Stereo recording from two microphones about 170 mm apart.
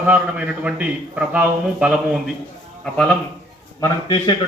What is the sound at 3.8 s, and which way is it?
Speech, 25° left (ahead or behind).